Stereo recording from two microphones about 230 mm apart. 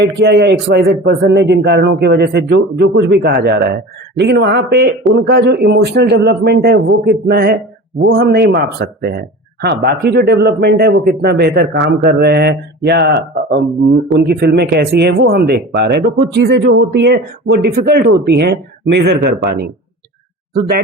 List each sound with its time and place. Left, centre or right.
0.0 s speech: right